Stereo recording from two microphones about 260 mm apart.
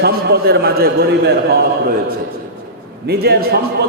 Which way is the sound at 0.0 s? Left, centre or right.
Right.